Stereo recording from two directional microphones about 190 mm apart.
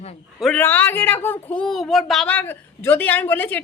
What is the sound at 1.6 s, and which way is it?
A woman's voice, centre (ahead or behind).